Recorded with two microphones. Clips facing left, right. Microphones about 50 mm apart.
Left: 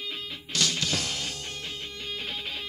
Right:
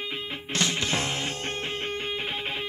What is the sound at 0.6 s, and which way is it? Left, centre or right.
Music, right.